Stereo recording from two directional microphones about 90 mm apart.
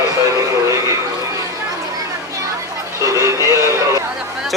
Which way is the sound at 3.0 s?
35° right (ahead or behind).